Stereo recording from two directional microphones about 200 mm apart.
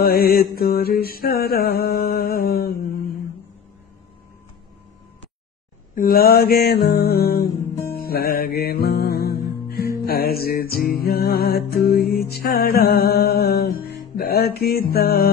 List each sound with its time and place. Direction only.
0.0 s music: 50° left (ahead or behind)
5.9 s music: 45° left (ahead or behind)